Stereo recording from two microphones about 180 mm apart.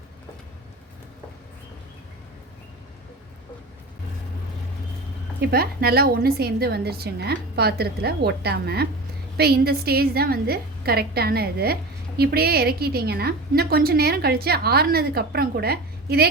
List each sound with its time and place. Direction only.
5.4 s a woman's voice: 60° right (ahead or behind)